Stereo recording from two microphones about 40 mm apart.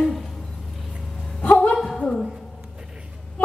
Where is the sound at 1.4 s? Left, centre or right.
Left.